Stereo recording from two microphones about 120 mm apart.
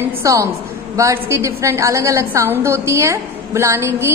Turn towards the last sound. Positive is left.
turn(degrees=-20)  # may be behind; listen again after turning